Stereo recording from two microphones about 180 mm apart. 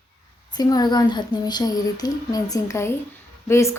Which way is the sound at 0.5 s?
20° left (ahead or behind).